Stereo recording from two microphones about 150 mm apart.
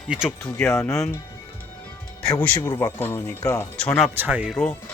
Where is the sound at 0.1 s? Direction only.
5° right (ahead or behind).